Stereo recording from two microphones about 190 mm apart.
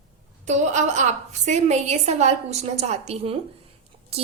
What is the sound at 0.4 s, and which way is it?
A woman's voice, 40° right (ahead or behind).